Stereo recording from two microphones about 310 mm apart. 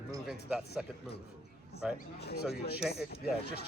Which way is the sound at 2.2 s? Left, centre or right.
Left.